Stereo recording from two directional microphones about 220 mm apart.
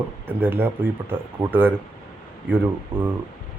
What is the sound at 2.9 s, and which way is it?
Speech, 25° right (ahead or behind).